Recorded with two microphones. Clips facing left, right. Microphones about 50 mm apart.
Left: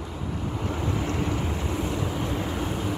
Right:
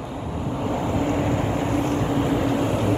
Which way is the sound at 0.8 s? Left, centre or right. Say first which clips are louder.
Right 6 dB; right.